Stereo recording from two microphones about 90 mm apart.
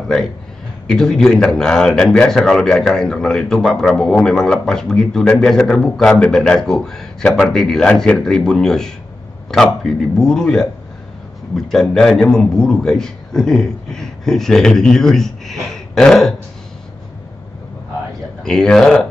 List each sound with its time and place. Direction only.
0.8 s a man's voice: 5° left (ahead or behind)
18.4 s a man's voice: 5° left (ahead or behind)